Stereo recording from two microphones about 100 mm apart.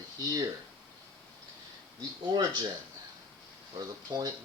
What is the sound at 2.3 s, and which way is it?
Speech, 45° right (ahead or behind).